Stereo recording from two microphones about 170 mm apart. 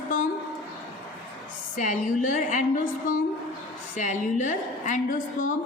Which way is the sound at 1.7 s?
50° left (ahead or behind).